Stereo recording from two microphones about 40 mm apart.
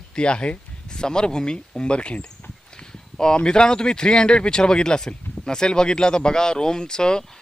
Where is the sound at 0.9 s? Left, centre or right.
Centre.